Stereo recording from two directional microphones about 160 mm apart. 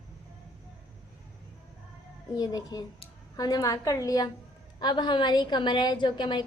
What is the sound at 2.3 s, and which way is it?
A woman's voice, 25° left (ahead or behind).